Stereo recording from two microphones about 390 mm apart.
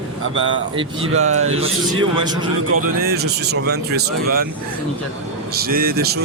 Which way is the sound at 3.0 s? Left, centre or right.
Right.